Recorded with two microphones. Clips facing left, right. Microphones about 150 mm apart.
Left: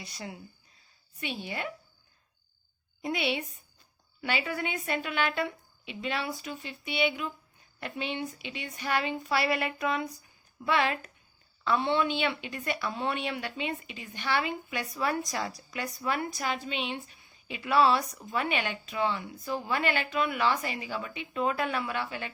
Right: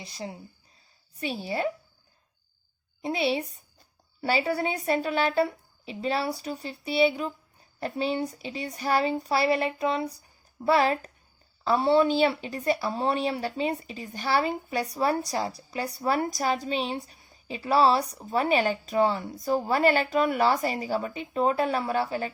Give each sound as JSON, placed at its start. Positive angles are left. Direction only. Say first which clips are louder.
{"t": 0.0, "sound": "speech", "louder": "right 4 dB", "side_deg": -30}
{"t": 3.0, "sound": "speech", "louder": "right 4 dB", "side_deg": -30}